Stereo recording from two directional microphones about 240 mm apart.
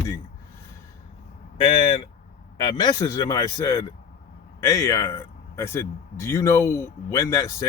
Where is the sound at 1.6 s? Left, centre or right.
Centre.